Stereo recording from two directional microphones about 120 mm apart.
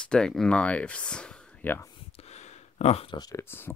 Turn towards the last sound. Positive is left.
turn(degrees=20)  # may be behind; listen again after turning